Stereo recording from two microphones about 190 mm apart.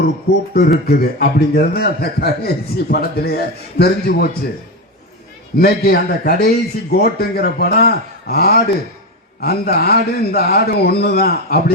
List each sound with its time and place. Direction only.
0.5 s a man's voice: 55° left (ahead or behind)
5.5 s a man's voice: 55° left (ahead or behind)